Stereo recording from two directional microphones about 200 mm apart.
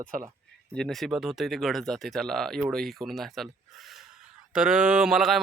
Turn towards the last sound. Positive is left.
turn(degrees=0)  # may be behind; listen again after turning